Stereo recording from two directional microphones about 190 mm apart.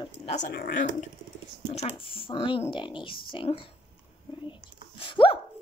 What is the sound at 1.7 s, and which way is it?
Speech, 30° left (ahead or behind).